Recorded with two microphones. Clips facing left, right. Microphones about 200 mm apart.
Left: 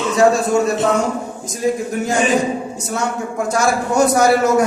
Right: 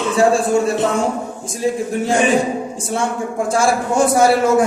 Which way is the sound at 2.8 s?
30° right (ahead or behind).